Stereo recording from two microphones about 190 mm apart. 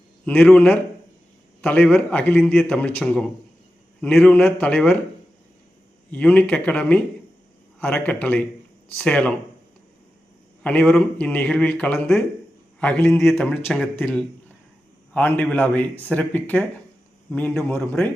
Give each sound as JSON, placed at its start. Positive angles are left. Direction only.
{"t": 0.3, "sound": "a man's voice", "side_deg": 5}
{"t": 6.1, "sound": "a man's voice", "side_deg": 5}
{"t": 10.6, "sound": "a man's voice", "side_deg": 5}